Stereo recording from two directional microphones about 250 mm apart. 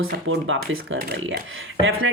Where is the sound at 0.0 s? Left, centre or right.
Right.